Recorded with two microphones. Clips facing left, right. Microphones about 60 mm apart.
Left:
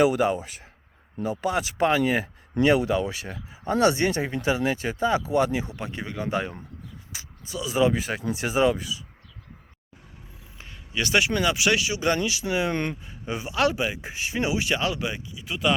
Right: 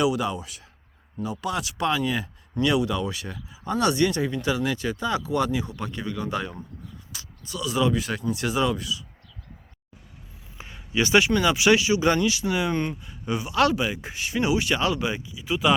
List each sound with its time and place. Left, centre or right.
0.0 s speech: left
10.6 s a sound: centre
11.3 s speech: centre
12.5 s speech: centre
12.7 s speech: left
13.1 s a man's voice: left
13.5 s speech: centre